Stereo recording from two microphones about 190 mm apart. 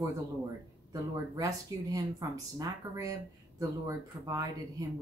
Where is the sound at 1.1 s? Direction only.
20° right (ahead or behind).